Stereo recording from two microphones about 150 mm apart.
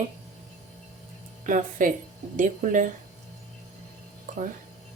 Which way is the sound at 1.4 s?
60° right (ahead or behind).